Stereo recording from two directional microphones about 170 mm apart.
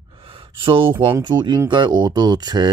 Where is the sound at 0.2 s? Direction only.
30° right (ahead or behind).